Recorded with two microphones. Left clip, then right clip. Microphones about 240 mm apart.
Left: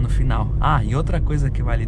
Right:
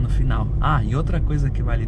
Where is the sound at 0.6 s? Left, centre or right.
Left.